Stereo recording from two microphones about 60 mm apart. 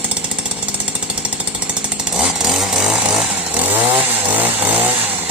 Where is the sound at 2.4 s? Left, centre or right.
Centre.